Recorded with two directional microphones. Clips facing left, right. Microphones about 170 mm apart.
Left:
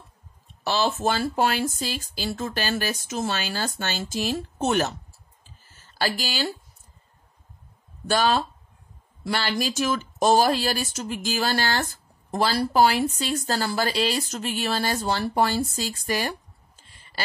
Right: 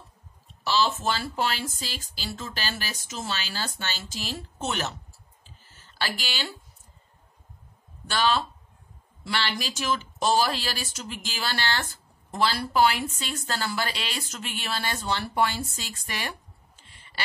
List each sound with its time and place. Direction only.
0.7 s speech: 50° left (ahead or behind)
5.4 s a sound: 45° left (ahead or behind)
8.1 s speech: 45° left (ahead or behind)